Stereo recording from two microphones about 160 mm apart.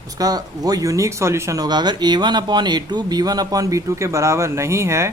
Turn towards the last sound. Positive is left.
turn(degrees=-15)  # may be behind; listen again after turning